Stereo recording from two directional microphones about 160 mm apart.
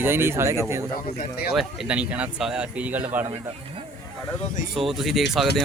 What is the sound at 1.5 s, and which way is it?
Speech, 5° right (ahead or behind).